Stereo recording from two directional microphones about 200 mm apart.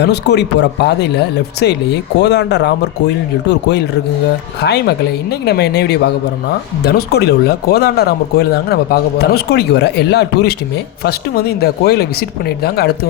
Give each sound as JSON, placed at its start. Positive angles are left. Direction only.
{"t": 0.0, "sound": "speech", "side_deg": 55}